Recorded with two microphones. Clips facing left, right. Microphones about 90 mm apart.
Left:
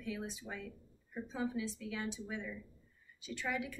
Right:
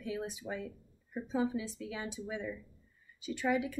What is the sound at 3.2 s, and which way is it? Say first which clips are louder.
Speech: right 7 dB; 15° right (ahead or behind).